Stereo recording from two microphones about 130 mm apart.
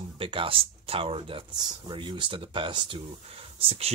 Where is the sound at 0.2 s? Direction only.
45° right (ahead or behind).